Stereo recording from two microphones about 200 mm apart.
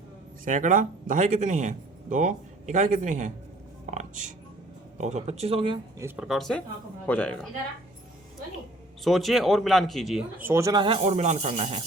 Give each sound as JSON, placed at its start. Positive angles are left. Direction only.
{"t": 0.4, "sound": "speech", "side_deg": -40}
{"t": 4.9, "sound": "speech", "side_deg": -35}
{"t": 6.0, "sound": "speech", "side_deg": -10}
{"t": 9.0, "sound": "speech", "side_deg": 0}